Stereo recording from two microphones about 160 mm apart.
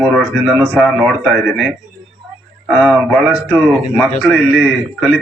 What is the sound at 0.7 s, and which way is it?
Speech, centre (ahead or behind).